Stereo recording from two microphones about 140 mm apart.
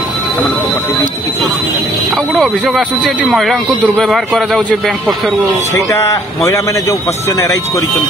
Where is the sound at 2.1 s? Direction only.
Centre (ahead or behind).